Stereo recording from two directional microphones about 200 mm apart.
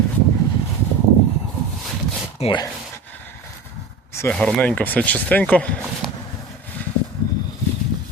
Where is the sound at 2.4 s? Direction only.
25° left (ahead or behind).